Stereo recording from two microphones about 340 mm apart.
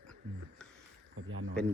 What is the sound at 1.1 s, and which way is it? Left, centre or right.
Speech, right.